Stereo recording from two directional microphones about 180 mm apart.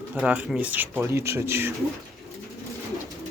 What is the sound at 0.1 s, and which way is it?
Speech, 5° right (ahead or behind).